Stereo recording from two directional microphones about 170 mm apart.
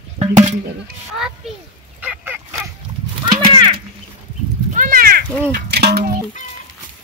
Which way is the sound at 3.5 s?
30° right (ahead or behind).